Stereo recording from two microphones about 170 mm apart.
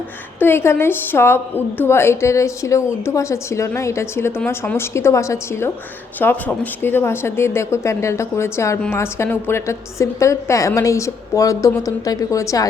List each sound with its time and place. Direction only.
0.3 s a woman's voice: 15° left (ahead or behind)